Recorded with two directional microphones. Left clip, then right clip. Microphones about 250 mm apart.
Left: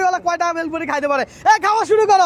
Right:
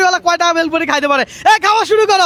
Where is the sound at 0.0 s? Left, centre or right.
Right.